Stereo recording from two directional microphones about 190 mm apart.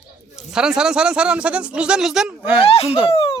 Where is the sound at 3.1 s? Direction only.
30° left (ahead or behind).